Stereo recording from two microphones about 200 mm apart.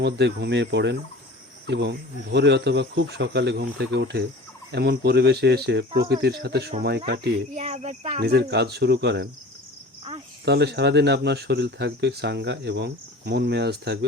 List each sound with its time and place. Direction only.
0.0 s speech: 60° right (ahead or behind)
7.5 s speech: 35° right (ahead or behind)
8.2 s speech: 55° right (ahead or behind)
10.4 s speech: 55° right (ahead or behind)